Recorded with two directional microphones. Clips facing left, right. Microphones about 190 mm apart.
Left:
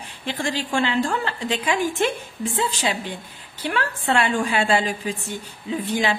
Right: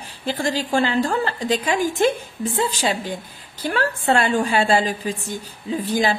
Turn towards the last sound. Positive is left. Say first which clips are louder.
# right 2 dB
turn(degrees=-35)  # may be behind; listen again after turning